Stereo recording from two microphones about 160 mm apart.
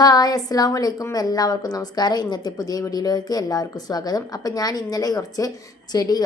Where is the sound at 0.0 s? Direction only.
25° left (ahead or behind).